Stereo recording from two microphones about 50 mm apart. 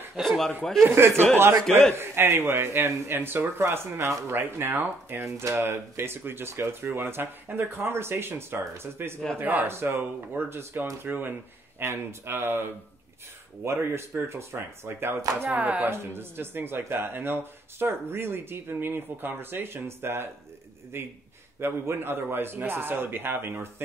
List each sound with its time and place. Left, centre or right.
0.2 s a man's voice: centre
0.8 s a man's voice: right
5.2 s a man's voice: right
9.4 s speech: right
9.7 s a man's voice: right
11.1 s speech: right
11.8 s a man's voice: right
13.7 s speech: right
15.5 s speech: right
15.9 s a man's voice: right